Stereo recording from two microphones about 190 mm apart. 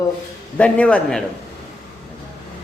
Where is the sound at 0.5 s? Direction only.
5° left (ahead or behind).